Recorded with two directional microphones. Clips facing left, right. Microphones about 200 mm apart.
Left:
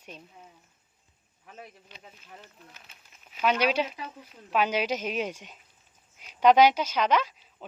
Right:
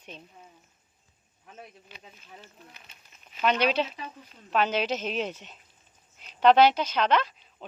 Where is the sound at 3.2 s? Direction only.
5° left (ahead or behind).